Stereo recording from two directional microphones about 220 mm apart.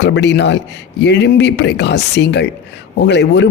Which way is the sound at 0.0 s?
55° left (ahead or behind).